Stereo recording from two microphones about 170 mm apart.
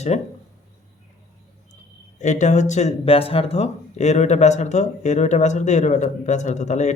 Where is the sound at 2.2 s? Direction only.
45° left (ahead or behind).